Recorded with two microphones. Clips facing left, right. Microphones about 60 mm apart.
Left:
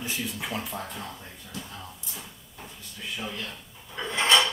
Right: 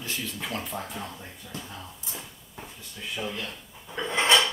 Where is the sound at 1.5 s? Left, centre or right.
Right.